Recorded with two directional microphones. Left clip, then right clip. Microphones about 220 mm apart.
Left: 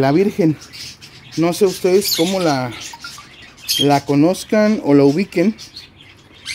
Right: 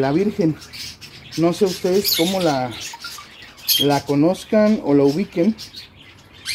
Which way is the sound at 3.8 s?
55° left (ahead or behind).